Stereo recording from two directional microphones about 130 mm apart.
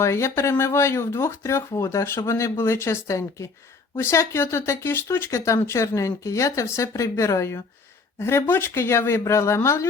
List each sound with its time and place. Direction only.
0.0 s speech: 20° left (ahead or behind)